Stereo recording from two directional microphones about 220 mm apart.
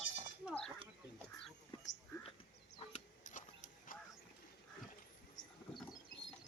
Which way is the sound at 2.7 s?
30° left (ahead or behind).